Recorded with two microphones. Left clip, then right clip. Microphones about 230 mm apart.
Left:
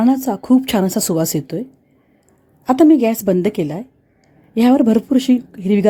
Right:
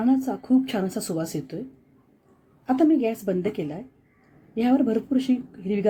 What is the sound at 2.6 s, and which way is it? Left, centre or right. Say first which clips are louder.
Speech: left 9 dB; left.